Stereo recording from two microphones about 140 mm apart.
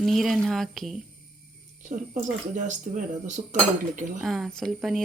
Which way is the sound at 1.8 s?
65° right (ahead or behind).